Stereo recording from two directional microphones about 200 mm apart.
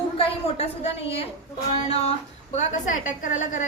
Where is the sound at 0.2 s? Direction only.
30° left (ahead or behind).